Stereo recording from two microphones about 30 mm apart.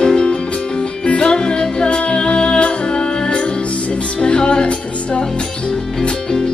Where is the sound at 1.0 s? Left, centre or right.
Left.